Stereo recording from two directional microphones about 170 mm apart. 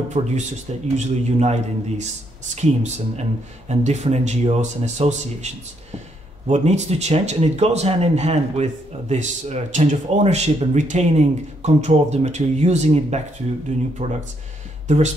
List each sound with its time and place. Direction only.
0.1 s a man's voice: 45° right (ahead or behind)